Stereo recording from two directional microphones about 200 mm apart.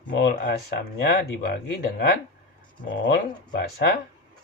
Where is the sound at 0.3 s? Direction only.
55° left (ahead or behind).